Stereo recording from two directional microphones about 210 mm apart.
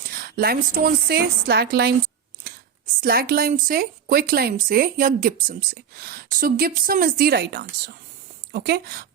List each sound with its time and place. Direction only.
0.0 s speech: 45° right (ahead or behind)
3.0 s speech: 45° right (ahead or behind)